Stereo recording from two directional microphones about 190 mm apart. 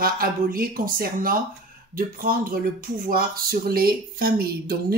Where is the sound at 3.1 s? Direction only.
50° right (ahead or behind).